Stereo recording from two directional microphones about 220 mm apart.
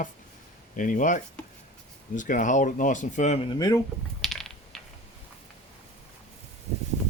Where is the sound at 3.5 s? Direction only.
15° left (ahead or behind).